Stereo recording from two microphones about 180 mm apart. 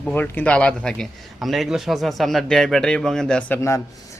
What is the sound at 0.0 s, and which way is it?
A man's voice, 10° left (ahead or behind).